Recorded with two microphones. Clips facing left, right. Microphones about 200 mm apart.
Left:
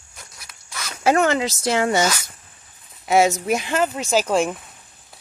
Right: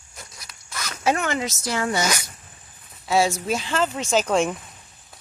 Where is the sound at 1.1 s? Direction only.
35° left (ahead or behind).